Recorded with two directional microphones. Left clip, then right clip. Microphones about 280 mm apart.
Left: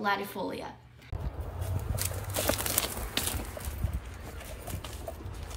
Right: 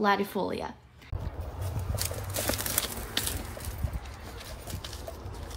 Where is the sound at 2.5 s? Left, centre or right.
Centre.